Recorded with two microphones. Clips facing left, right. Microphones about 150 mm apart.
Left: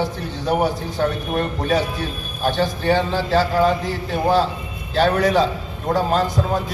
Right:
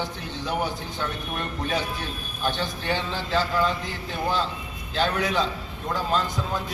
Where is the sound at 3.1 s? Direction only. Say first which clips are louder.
Left 7 dB; 60° left (ahead or behind).